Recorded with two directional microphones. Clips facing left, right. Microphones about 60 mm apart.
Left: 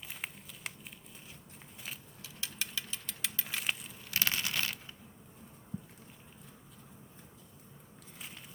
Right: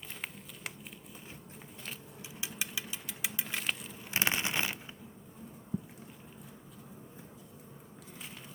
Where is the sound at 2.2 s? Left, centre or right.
Centre.